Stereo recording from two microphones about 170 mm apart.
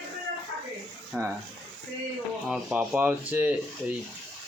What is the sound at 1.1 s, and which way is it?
Speech, 5° right (ahead or behind).